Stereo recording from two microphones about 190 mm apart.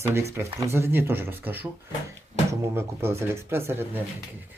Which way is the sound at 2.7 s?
15° right (ahead or behind).